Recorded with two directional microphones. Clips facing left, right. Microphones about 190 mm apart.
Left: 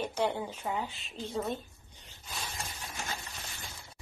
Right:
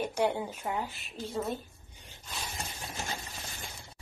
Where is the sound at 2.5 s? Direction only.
25° right (ahead or behind).